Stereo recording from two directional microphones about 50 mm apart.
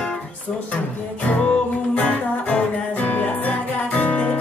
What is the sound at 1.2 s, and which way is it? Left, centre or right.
Music, left.